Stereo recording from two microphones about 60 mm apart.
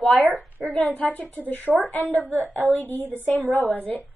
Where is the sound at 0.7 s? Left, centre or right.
Left.